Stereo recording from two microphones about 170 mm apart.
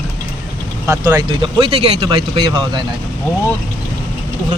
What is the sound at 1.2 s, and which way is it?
Speech, 30° right (ahead or behind).